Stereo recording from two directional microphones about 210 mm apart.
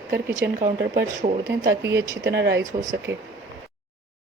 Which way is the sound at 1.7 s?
55° right (ahead or behind).